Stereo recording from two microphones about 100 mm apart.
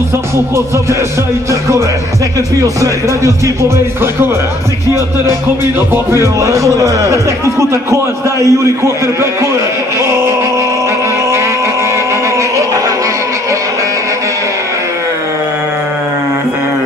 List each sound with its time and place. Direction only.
2.6 s speech: 30° right (ahead or behind)
6.1 s a man's voice: 30° right (ahead or behind)